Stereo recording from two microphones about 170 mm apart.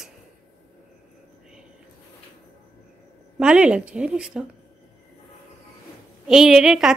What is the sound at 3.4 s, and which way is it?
A woman's voice, 5° right (ahead or behind).